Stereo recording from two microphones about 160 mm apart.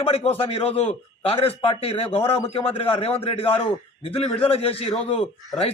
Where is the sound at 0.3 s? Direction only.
35° left (ahead or behind).